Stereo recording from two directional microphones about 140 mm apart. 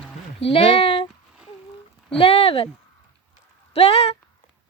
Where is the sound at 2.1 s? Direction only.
40° left (ahead or behind).